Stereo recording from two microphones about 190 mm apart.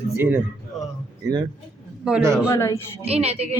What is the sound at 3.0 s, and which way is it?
Speech, 30° right (ahead or behind).